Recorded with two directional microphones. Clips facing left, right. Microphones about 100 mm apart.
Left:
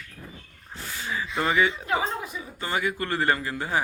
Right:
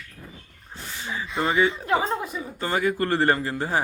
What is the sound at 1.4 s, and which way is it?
Speech, 30° right (ahead or behind).